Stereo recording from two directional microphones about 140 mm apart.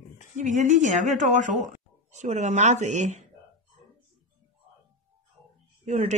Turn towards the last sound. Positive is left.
turn(degrees=-55)  # may be behind; listen again after turning